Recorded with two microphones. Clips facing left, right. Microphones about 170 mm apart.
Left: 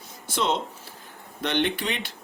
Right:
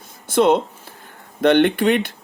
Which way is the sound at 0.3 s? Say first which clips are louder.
Right 11 dB; 55° right (ahead or behind).